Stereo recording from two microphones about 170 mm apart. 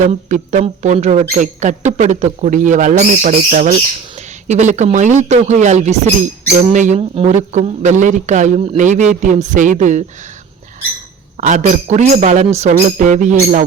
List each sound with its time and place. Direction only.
0.0 s speech: 45° right (ahead or behind)
11.3 s speech: 45° right (ahead or behind)